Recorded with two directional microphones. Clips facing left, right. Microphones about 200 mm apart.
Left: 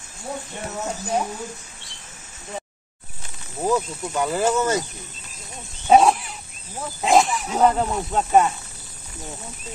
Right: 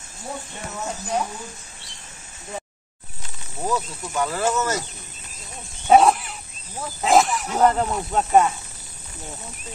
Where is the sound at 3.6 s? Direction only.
15° left (ahead or behind).